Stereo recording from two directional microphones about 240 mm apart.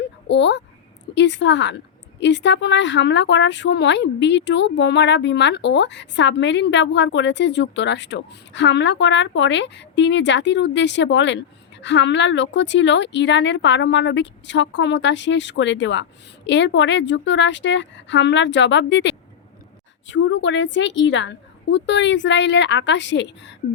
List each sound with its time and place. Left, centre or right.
0.3 s speech: left